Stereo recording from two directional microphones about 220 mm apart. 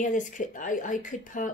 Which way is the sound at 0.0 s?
35° left (ahead or behind).